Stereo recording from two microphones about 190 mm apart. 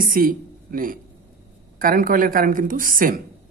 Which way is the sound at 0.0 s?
50° right (ahead or behind).